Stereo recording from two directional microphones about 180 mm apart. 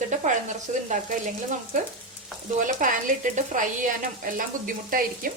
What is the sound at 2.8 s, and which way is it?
Speech, 45° right (ahead or behind).